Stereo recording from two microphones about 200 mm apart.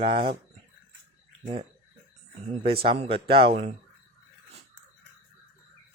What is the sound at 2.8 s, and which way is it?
Speech, 30° right (ahead or behind).